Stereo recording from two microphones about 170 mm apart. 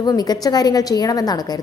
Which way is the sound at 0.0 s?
25° left (ahead or behind).